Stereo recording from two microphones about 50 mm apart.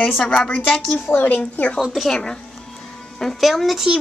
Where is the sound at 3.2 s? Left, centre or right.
Centre.